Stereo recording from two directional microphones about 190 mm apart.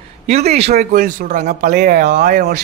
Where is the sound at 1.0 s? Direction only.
45° right (ahead or behind).